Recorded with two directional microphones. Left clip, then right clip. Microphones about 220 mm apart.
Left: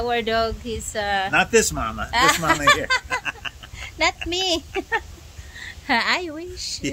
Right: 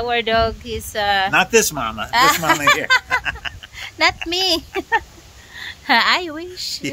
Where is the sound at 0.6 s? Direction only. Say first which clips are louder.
Right 4 dB; 10° right (ahead or behind).